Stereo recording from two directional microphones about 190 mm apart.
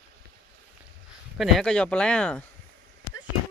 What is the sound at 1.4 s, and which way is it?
Speech, centre (ahead or behind).